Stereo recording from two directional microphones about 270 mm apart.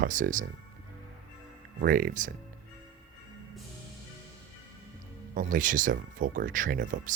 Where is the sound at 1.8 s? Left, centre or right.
Right.